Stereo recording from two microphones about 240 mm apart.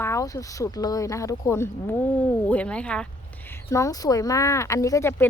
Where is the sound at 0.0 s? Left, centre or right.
Centre.